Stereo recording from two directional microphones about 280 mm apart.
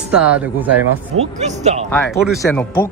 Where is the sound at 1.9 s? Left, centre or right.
Centre.